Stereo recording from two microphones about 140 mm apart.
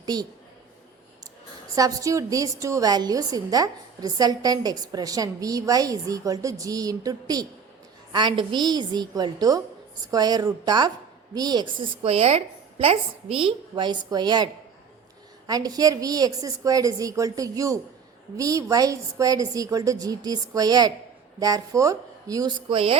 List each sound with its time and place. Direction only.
0.0 s a woman's voice: 30° right (ahead or behind)
1.7 s a woman's voice: 25° right (ahead or behind)
22.7 s a woman's voice: 40° right (ahead or behind)